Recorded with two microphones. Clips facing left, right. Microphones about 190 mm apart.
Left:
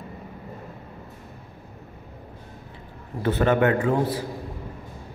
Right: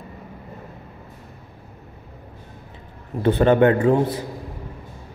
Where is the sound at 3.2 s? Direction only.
30° right (ahead or behind).